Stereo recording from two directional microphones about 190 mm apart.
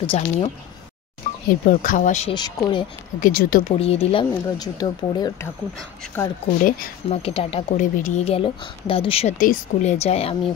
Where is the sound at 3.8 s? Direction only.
30° left (ahead or behind).